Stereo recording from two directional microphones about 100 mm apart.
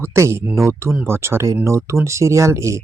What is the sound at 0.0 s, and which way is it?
Speech, 25° right (ahead or behind).